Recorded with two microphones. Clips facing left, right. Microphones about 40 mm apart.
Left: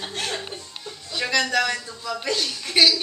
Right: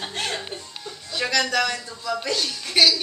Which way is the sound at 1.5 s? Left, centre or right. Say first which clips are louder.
Left 1 dB; centre.